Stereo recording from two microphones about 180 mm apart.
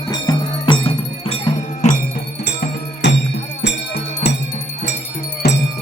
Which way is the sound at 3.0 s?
75° left (ahead or behind).